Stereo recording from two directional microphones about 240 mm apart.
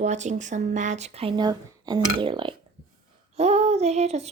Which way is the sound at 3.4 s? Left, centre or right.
Right.